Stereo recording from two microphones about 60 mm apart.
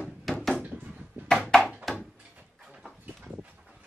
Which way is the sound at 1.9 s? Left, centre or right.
Centre.